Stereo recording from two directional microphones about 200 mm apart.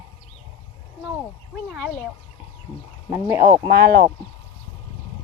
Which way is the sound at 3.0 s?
15° right (ahead or behind).